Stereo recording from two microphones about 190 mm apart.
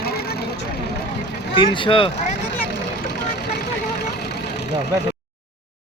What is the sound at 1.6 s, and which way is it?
Speech, 25° left (ahead or behind).